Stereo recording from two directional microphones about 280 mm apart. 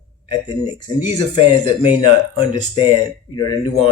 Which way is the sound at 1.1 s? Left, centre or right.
Left.